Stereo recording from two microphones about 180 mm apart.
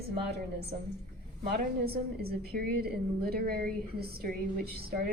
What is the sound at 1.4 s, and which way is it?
A woman's voice, 60° right (ahead or behind).